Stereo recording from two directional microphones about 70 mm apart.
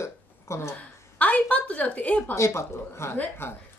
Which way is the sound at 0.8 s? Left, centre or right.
Left.